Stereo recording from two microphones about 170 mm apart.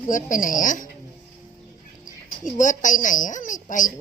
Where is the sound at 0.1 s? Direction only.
50° left (ahead or behind).